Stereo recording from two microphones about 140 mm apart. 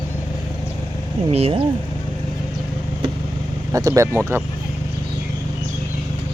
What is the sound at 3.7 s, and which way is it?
Speech, 25° right (ahead or behind).